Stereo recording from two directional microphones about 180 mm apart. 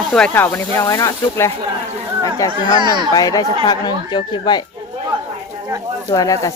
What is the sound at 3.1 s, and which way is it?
Speech, 20° left (ahead or behind).